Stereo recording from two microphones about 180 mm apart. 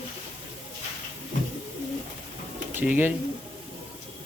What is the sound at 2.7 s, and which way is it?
Speech, 10° right (ahead or behind).